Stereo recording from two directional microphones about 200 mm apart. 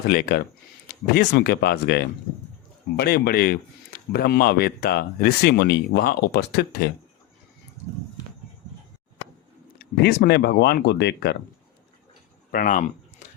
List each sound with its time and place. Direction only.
0.1 s speech: 50° left (ahead or behind)
10.0 s speech: 55° left (ahead or behind)
12.5 s a sound: 40° left (ahead or behind)